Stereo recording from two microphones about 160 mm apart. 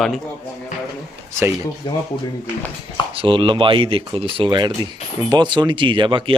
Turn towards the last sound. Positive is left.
turn(degrees=-30)  # may be behind; listen again after turning